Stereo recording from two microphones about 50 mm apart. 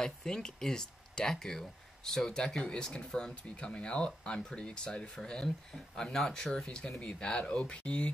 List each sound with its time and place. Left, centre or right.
0.0 s speech: centre